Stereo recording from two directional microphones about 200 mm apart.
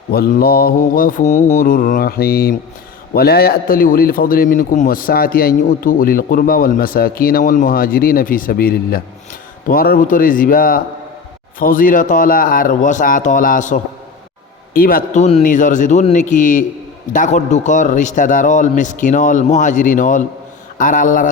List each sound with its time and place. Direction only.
0.1 s a man's voice: 50° left (ahead or behind)